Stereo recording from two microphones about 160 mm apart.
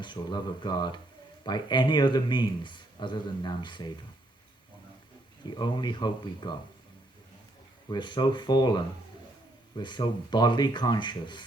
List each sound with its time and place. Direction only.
0.0 s speech: 30° left (ahead or behind)
5.5 s speech: 30° left (ahead or behind)
7.9 s speech: 30° left (ahead or behind)